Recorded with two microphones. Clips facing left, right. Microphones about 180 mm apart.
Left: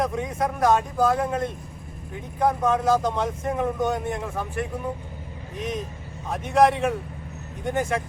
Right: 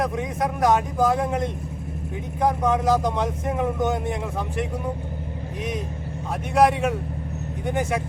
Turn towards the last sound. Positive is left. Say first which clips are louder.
# right 1 dB
turn(degrees=-10)  # may be behind; listen again after turning